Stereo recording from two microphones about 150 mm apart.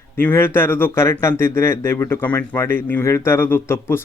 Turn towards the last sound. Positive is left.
turn(degrees=15)  # may be behind; listen again after turning